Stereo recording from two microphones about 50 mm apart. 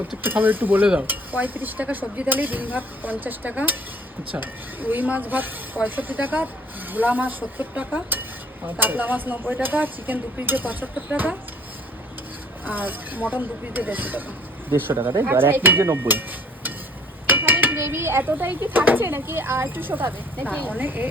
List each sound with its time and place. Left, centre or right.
0.2 s speech: right
12.6 s speech: right
15.8 s speech: right
17.2 s speech: right